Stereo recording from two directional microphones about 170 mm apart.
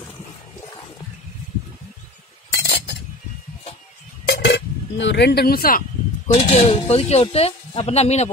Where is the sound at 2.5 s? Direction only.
80° left.